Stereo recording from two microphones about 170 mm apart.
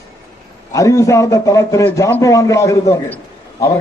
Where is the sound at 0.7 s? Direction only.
20° left (ahead or behind).